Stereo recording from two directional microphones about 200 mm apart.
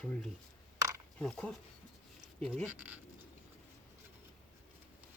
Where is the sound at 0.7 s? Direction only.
15° right (ahead or behind).